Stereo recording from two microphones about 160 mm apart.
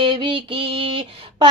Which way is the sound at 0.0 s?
30° right (ahead or behind).